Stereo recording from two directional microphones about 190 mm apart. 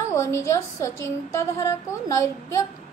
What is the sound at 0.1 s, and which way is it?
A woman's voice, 15° left (ahead or behind).